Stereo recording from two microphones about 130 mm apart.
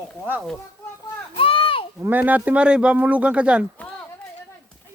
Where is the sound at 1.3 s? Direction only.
45° left (ahead or behind).